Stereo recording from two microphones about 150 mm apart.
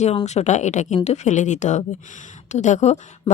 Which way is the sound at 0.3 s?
50° left (ahead or behind).